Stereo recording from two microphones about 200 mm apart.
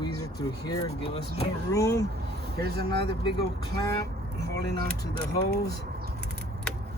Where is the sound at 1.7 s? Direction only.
15° left (ahead or behind).